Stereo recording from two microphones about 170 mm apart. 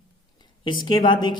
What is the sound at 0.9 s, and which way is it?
Speech, 25° left (ahead or behind).